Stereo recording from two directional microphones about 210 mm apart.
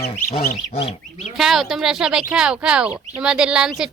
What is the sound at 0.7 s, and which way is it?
Fowl, 30° left (ahead or behind).